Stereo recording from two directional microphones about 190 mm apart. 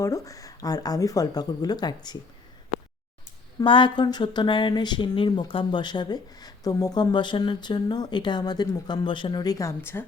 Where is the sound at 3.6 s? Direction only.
25° left (ahead or behind).